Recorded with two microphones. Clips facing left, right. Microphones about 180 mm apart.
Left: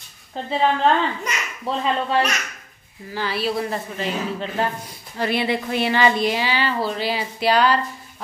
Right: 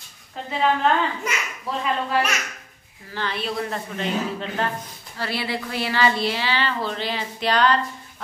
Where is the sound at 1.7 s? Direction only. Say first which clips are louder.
Left 4 dB; 30° left (ahead or behind).